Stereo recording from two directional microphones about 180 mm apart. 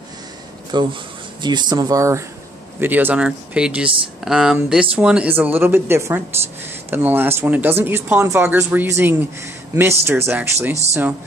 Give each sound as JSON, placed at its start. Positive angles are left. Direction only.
{"t": 0.7, "sound": "speech", "side_deg": -25}